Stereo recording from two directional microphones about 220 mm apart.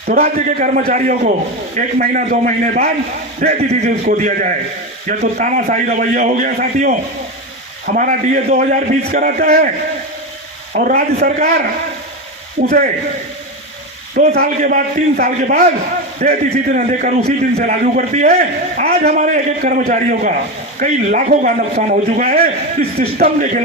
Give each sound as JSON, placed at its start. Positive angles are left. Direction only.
{"t": 0.1, "sound": "a man's voice", "side_deg": -30}
{"t": 10.8, "sound": "a man's voice", "side_deg": -40}
{"t": 14.2, "sound": "a man's voice", "side_deg": -40}